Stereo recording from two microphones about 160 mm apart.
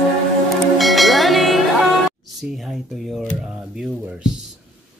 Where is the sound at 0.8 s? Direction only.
Centre (ahead or behind).